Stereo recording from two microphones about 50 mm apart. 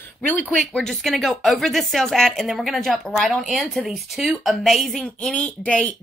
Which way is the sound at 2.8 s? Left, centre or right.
Centre.